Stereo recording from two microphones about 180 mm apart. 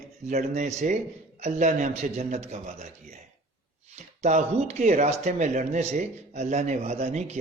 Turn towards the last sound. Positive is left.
turn(degrees=-40)  # may be behind; listen again after turning